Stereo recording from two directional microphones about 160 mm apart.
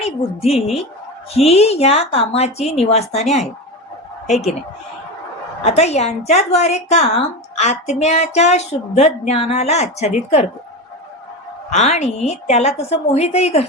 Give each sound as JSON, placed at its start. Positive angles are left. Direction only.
{"t": 0.0, "sound": "a woman's voice", "side_deg": 40}
{"t": 5.6, "sound": "a woman's voice", "side_deg": 45}
{"t": 11.7, "sound": "a woman's voice", "side_deg": 45}